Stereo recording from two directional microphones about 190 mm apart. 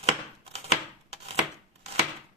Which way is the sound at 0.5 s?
35° right (ahead or behind).